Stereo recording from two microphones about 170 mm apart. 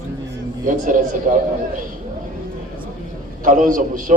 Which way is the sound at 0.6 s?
55° right (ahead or behind).